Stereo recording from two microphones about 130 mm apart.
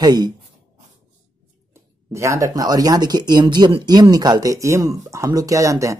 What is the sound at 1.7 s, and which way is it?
Speech, 20° right (ahead or behind).